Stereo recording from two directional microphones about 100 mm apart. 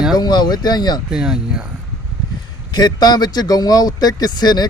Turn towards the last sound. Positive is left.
turn(degrees=45)  # may be behind; listen again after turning